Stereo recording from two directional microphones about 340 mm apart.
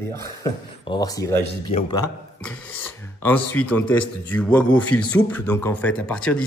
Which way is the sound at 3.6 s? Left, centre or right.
Left.